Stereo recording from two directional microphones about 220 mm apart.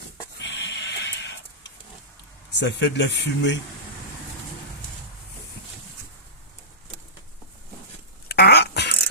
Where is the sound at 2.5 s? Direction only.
50° left (ahead or behind).